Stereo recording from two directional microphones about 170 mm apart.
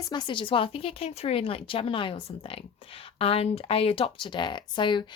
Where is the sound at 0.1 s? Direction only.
25° left (ahead or behind).